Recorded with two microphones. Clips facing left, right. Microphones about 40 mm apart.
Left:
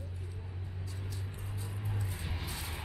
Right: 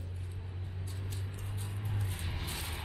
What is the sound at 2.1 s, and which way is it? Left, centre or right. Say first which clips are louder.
Vehicle: even; right.